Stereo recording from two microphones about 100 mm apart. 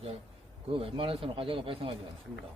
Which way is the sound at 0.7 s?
60° right (ahead or behind).